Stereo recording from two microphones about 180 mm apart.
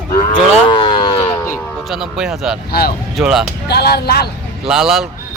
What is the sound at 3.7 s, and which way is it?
Speech, 65° left (ahead or behind).